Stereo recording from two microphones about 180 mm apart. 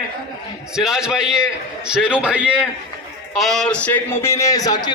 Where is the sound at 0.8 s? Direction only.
5° right (ahead or behind).